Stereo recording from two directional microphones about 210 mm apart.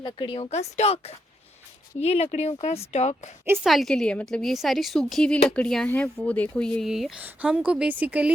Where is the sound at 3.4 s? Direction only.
10° right (ahead or behind).